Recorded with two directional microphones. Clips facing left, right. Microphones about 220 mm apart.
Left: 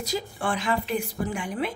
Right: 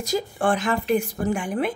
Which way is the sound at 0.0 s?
45° right (ahead or behind).